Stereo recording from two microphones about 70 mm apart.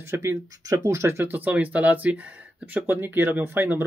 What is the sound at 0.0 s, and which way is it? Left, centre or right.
Speech, right.